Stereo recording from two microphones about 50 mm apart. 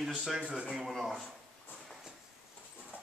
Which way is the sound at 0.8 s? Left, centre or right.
Centre.